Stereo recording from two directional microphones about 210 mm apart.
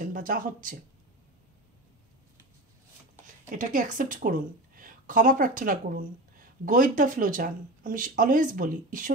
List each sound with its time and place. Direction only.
0.0 s speech: 40° right (ahead or behind)
3.4 s a woman's voice: 40° right (ahead or behind)